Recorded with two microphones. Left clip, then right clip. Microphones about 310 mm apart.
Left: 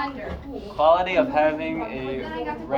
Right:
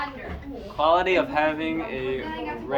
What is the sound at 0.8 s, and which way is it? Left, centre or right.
A man's voice, right.